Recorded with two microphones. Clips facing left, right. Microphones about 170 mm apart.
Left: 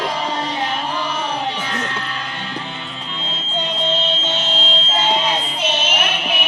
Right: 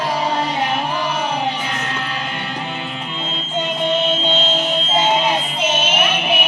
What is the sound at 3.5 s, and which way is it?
Music, 15° right (ahead or behind).